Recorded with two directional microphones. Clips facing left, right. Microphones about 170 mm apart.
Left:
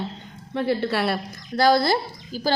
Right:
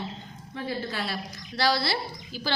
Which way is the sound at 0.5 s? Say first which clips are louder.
Left 9 dB; 70° left (ahead or behind).